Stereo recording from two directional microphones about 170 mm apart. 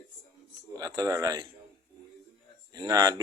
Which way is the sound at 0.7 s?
20° right (ahead or behind).